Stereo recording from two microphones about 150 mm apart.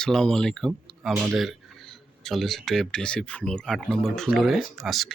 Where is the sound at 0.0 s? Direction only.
5° left (ahead or behind).